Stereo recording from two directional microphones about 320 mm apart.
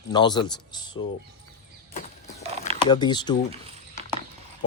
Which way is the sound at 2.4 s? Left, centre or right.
Centre.